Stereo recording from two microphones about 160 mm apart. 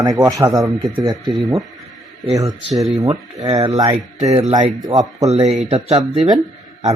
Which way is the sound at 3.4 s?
25° right (ahead or behind).